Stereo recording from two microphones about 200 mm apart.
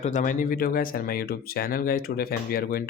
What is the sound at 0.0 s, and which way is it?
Speech, 40° left (ahead or behind).